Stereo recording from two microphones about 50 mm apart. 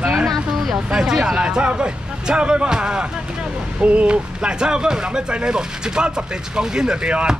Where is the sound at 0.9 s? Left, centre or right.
Centre.